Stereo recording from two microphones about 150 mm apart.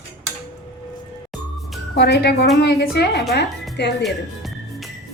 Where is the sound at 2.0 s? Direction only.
90° left.